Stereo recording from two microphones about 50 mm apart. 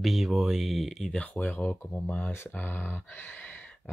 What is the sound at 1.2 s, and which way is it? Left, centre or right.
Speech, left.